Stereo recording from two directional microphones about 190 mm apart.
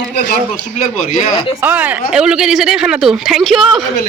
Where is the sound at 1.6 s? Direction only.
10° right (ahead or behind).